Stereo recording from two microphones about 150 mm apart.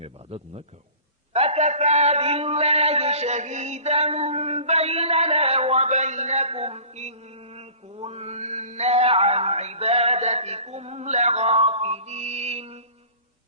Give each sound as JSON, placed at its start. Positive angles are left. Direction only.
{"t": 0.0, "sound": "a man's voice", "side_deg": -40}